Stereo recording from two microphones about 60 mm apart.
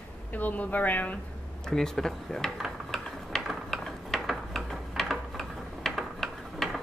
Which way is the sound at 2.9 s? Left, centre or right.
Centre.